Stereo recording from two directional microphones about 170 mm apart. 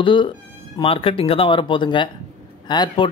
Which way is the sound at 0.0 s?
30° left (ahead or behind).